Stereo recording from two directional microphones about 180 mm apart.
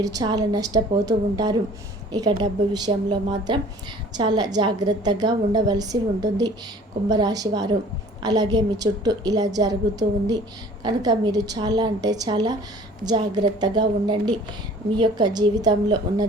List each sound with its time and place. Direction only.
0.0 s a woman's voice: 20° right (ahead or behind)